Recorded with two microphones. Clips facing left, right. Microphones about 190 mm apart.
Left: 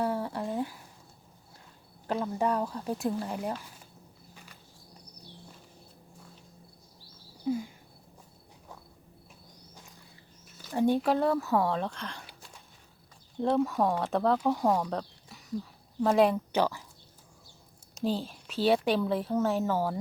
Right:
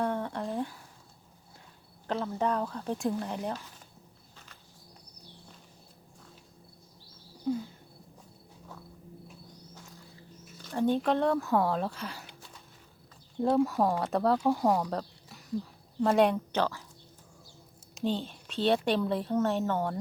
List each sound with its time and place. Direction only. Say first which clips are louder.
0.0 s a sound: left 1 dB; 5° left (ahead or behind)
2.0 s speech: left 1 dB; 10° left (ahead or behind)
7.4 s a sound: left 1 dB; 10° left (ahead or behind)
10.4 s speech: left 2 dB; 5° left (ahead or behind)
13.4 s a woman's voice: right 1 dB; centre (ahead or behind)
17.9 s a woman's voice: left 1 dB; 5° left (ahead or behind)